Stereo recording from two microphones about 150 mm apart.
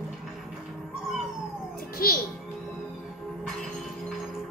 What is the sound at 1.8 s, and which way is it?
Cat, 85° left.